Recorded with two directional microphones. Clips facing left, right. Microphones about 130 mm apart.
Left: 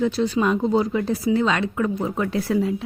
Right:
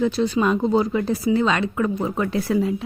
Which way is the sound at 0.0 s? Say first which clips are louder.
Right 1 dB; 25° right (ahead or behind).